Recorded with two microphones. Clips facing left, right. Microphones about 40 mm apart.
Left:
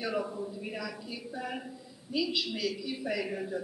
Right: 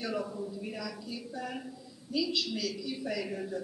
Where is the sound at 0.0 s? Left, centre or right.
Centre.